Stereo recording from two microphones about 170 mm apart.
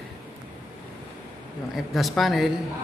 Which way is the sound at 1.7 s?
Centre (ahead or behind).